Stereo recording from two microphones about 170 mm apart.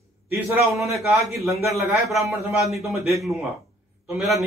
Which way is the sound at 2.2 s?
15° right (ahead or behind).